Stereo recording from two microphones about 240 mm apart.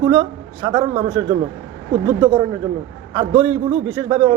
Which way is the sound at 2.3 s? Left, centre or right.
Centre.